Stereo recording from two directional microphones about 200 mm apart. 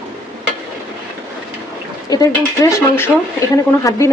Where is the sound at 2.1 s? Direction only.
15° left (ahead or behind).